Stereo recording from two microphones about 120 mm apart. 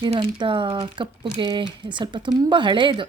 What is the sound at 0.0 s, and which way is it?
Speech, 40° right (ahead or behind).